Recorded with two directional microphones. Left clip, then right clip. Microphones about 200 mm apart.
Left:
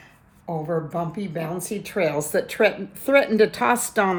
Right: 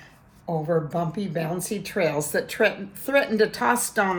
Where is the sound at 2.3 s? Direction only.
30° left (ahead or behind).